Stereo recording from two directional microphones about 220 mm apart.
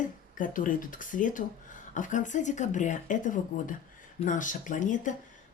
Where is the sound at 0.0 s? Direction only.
35° left (ahead or behind).